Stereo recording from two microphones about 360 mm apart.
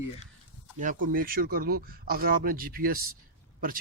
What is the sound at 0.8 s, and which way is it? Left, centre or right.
Speech, right.